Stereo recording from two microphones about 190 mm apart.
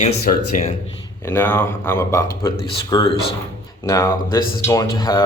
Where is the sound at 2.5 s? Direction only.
30° left (ahead or behind).